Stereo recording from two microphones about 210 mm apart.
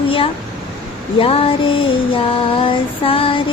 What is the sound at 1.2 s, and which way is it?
Female singing, 25° left (ahead or behind).